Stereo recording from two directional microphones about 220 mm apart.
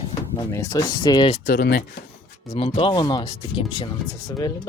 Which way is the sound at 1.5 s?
45° left (ahead or behind).